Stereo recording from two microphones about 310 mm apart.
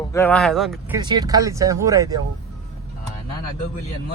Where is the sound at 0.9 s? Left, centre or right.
Centre.